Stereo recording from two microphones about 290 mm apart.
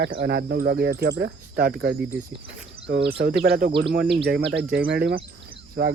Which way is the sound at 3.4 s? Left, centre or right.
Right.